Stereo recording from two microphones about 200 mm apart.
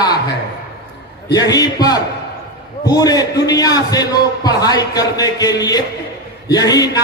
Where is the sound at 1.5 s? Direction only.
20° left (ahead or behind).